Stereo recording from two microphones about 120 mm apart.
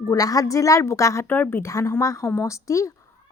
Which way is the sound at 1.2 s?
15° left (ahead or behind).